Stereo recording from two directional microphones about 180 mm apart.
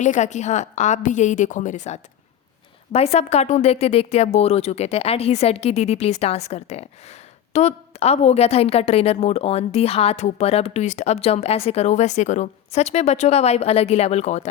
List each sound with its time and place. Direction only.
0.0 s a woman's voice: 40° left (ahead or behind)